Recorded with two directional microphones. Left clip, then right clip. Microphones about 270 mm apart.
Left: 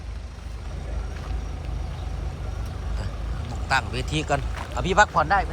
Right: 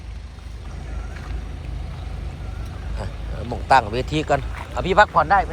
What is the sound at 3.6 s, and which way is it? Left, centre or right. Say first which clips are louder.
Speech: right 8 dB; centre.